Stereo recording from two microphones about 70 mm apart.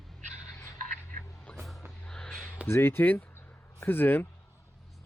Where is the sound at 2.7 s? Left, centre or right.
Left.